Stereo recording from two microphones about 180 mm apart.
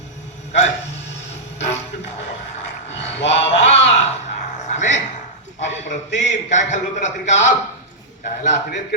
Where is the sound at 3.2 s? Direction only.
90° left.